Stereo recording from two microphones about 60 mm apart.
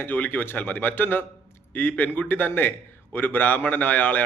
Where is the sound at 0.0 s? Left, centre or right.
Left.